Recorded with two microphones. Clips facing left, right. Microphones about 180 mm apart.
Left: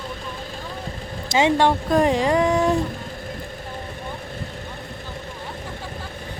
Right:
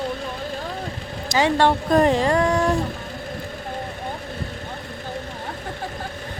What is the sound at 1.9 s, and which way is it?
Speech, 10° left (ahead or behind).